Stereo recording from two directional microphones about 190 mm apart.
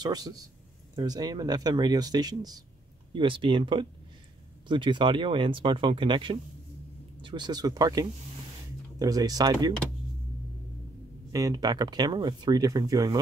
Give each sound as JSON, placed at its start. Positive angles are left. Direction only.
{"t": 0.0, "sound": "speech", "side_deg": -20}
{"t": 11.3, "sound": "speech", "side_deg": -20}